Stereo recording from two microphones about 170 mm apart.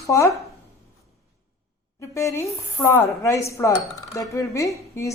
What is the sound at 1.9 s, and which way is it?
Speech, 15° left (ahead or behind).